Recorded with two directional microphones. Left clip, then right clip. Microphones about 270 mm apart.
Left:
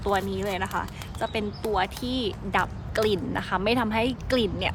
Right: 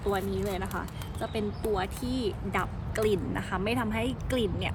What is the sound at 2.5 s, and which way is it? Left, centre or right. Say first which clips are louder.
A woman's voice: left 6 dB; left.